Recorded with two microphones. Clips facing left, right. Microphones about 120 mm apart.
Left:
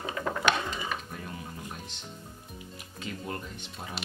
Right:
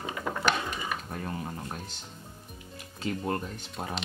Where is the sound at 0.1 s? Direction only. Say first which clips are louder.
Left 1 dB; centre (ahead or behind).